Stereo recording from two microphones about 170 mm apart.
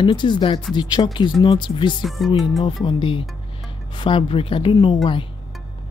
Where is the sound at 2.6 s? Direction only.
30° left (ahead or behind).